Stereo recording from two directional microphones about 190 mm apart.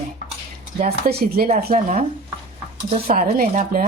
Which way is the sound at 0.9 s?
50° right (ahead or behind).